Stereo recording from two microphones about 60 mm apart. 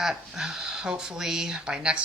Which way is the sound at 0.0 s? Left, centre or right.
Centre.